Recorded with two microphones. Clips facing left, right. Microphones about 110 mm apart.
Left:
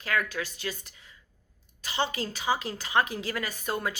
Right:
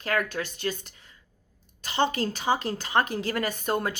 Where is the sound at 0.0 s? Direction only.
45° right (ahead or behind).